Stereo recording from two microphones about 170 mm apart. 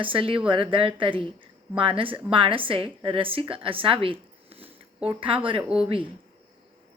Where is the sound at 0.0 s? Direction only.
30° right (ahead or behind).